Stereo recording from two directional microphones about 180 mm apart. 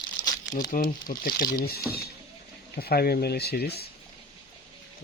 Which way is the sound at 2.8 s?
60° left (ahead or behind).